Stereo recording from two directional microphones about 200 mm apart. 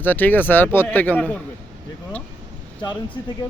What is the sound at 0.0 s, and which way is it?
A man's voice, 10° left (ahead or behind).